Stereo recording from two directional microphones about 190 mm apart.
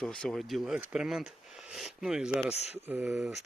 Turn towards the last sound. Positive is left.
turn(degrees=-10)  # may be behind; listen again after turning